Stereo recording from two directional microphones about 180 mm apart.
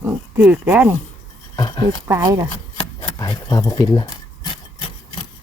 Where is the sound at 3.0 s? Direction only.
20° left (ahead or behind).